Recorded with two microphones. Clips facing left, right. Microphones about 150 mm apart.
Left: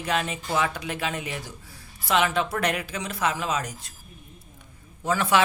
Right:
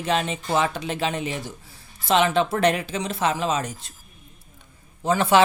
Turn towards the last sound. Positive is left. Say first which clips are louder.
# right 4 dB
turn(degrees=-25)  # may be behind; listen again after turning